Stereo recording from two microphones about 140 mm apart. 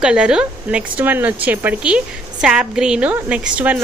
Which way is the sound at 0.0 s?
5° right (ahead or behind).